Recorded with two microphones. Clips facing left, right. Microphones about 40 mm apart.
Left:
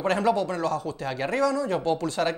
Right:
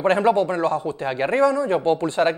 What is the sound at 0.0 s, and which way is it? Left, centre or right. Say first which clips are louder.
Speech: right 6 dB; right.